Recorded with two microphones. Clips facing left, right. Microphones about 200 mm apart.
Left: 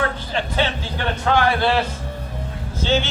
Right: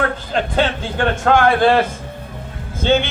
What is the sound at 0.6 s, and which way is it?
A man's voice, 50° right (ahead or behind).